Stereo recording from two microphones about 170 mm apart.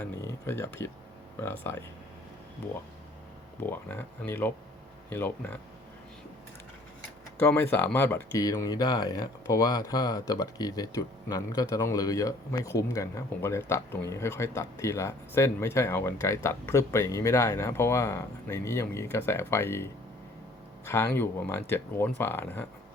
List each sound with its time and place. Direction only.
0.0 s speech: 15° left (ahead or behind)
3.7 s speech: 10° left (ahead or behind)
7.3 s speech: 15° left (ahead or behind)